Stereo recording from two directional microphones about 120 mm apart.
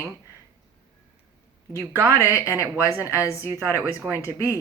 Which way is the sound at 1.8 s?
25° right (ahead or behind).